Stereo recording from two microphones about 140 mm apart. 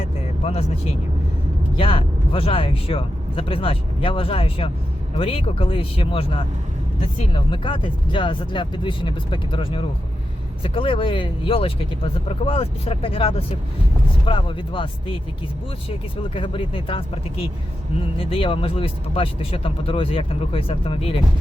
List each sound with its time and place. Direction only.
1.7 s speech: 40° left (ahead or behind)
18.0 s speech: 40° left (ahead or behind)